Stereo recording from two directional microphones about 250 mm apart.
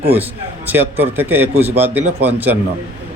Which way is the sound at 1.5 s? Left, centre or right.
Right.